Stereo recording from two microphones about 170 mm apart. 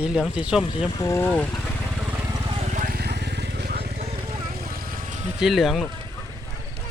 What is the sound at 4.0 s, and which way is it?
Vehicle, 35° right (ahead or behind).